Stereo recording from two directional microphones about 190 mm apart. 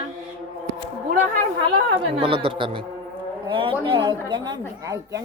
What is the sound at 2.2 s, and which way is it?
A woman's voice, 25° right (ahead or behind).